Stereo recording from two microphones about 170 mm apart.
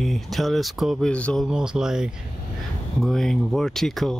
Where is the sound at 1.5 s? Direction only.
5° right (ahead or behind).